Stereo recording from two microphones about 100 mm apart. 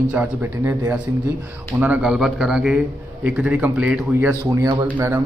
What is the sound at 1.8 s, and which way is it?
A man's voice, 10° right (ahead or behind).